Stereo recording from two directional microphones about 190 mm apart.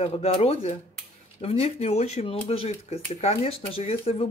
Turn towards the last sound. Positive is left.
turn(degrees=30)  # may be behind; listen again after turning